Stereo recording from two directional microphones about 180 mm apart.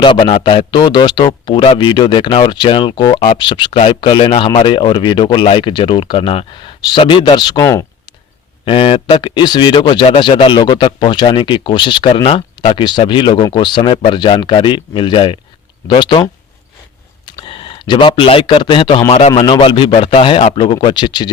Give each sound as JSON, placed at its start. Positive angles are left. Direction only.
{"t": 0.0, "sound": "speech", "side_deg": 25}
{"t": 8.6, "sound": "speech", "side_deg": 30}